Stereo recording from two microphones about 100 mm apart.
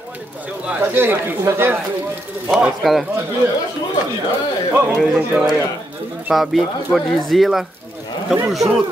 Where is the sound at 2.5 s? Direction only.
Centre (ahead or behind).